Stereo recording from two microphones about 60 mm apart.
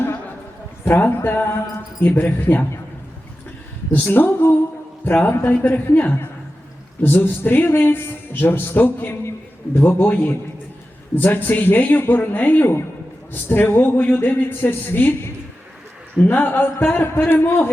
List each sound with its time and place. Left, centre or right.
0.9 s a man's voice: left
3.9 s a man's voice: left